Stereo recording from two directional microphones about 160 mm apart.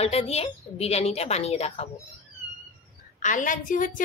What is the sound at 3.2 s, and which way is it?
Speech, 55° left (ahead or behind).